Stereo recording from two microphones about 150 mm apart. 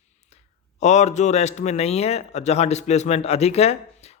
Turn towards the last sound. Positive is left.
turn(degrees=45)  # may be behind; listen again after turning